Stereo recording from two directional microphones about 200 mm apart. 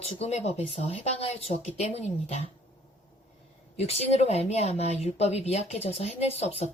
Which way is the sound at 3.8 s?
30° left (ahead or behind).